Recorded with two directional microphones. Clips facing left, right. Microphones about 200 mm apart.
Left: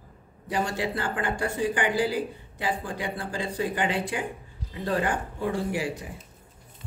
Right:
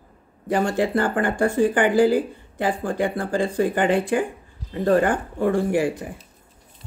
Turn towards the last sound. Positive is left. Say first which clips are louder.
# right 8 dB
turn(degrees=-50)  # may be behind; listen again after turning